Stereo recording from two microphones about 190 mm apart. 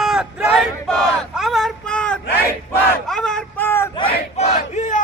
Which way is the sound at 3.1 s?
5° left (ahead or behind).